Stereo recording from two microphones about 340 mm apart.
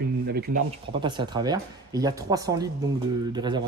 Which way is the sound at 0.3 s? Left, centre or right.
Right.